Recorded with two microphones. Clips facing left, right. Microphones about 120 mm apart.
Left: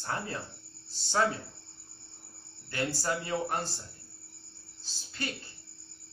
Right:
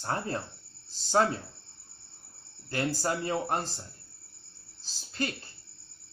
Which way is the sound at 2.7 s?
35° right (ahead or behind).